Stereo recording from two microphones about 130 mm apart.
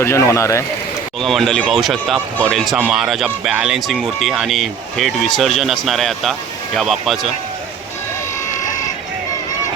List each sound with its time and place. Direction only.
0.0 s speech: 20° left (ahead or behind)
1.2 s speech: centre (ahead or behind)